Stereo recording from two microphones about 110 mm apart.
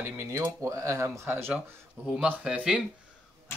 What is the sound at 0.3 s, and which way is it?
Speech, 25° right (ahead or behind).